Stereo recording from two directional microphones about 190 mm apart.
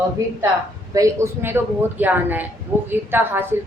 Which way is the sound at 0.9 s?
15° right (ahead or behind).